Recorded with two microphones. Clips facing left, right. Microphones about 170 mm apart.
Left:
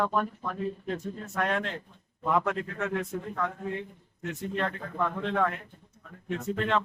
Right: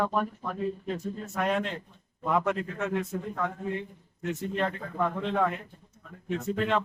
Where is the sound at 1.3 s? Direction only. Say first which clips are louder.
Right 1 dB; 5° right (ahead or behind).